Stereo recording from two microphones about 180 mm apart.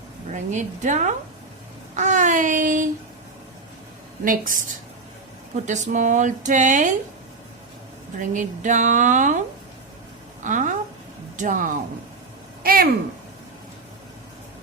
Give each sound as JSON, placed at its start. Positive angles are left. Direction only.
{"t": 0.5, "sound": "a woman's voice", "side_deg": -40}
{"t": 4.2, "sound": "speech", "side_deg": -50}
{"t": 5.6, "sound": "speech", "side_deg": -40}
{"t": 8.3, "sound": "speech", "side_deg": -45}
{"t": 10.4, "sound": "speech", "side_deg": -45}